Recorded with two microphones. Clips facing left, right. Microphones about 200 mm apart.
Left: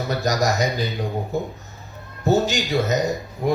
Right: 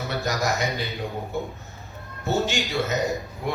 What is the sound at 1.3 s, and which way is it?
Speech, 40° left (ahead or behind).